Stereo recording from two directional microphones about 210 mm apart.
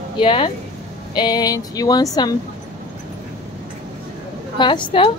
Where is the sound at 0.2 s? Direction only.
25° left (ahead or behind).